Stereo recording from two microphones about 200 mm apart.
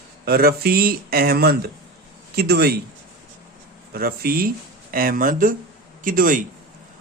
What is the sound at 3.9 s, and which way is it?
A man's voice, 50° right (ahead or behind).